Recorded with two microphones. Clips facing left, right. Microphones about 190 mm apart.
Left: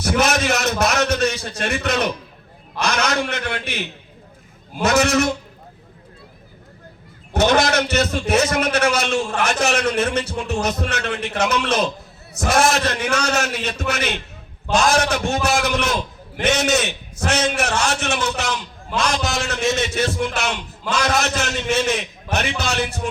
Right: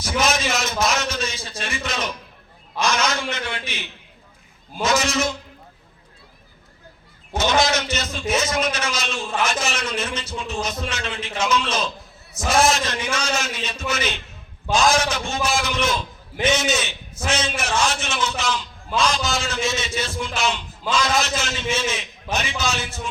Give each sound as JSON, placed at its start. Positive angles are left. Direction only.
{"t": 0.0, "sound": "a sound", "side_deg": 65}
{"t": 2.7, "sound": "a man's voice", "side_deg": 65}
{"t": 7.3, "sound": "a man's voice", "side_deg": 65}